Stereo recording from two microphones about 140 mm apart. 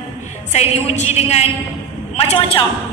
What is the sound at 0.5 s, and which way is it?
A woman's voice, 50° left (ahead or behind).